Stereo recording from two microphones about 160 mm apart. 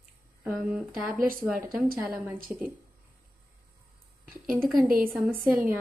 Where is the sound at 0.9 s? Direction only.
65° right (ahead or behind).